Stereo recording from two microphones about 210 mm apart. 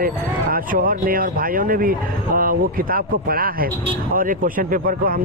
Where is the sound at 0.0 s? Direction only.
45° right (ahead or behind).